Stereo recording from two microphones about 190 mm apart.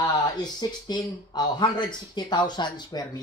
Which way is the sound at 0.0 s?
20° left (ahead or behind).